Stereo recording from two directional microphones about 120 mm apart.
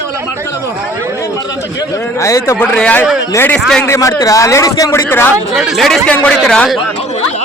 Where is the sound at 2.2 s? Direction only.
25° left (ahead or behind).